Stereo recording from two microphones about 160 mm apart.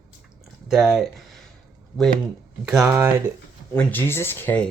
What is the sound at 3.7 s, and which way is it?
Speech, 15° left (ahead or behind).